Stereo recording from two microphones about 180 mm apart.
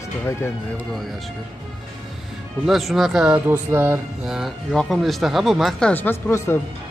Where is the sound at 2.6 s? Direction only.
Centre (ahead or behind).